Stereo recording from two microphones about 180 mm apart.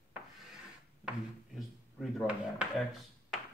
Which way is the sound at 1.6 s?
Centre (ahead or behind).